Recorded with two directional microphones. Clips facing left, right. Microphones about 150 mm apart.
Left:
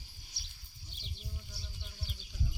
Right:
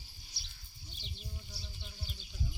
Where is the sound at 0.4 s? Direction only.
50° left (ahead or behind).